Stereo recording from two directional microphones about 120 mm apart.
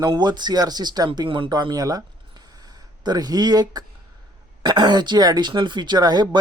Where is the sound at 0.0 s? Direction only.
35° right (ahead or behind).